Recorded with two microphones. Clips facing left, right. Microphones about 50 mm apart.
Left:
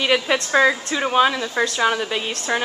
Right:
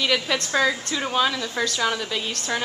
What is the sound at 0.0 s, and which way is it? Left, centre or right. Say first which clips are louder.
A woman's voice: left 4 dB; left.